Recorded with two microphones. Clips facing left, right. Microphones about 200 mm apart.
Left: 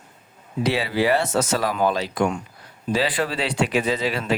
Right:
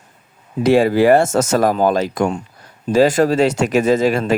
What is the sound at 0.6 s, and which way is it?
Speech, 45° right (ahead or behind).